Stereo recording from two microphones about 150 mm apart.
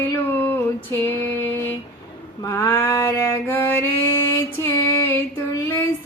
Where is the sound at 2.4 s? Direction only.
20° left (ahead or behind).